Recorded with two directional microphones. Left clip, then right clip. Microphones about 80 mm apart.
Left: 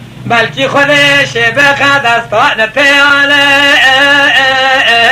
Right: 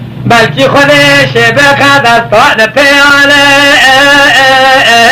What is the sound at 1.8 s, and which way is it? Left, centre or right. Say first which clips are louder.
Music: right 4 dB; left.